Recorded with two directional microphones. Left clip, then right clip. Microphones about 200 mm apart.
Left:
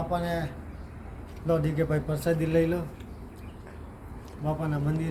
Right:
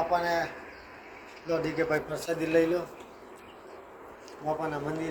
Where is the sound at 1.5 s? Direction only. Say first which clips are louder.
Left 1 dB; 5° right (ahead or behind).